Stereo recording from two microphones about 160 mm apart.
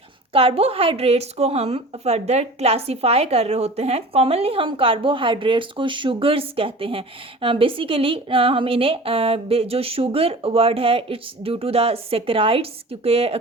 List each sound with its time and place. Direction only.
0.3 s speech: 35° right (ahead or behind)